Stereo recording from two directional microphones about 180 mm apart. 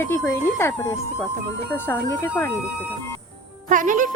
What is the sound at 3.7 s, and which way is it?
Speech, 45° right (ahead or behind).